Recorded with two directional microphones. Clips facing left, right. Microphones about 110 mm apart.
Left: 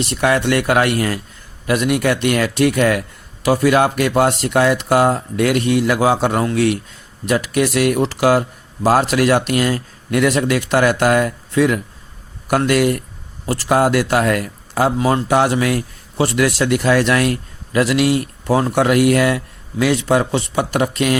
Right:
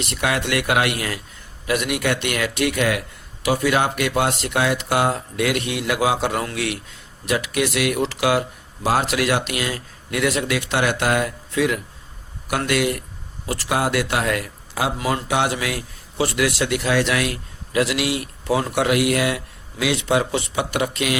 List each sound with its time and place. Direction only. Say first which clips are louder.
0.1 s a man's voice: left 6 dB; 40° left (ahead or behind)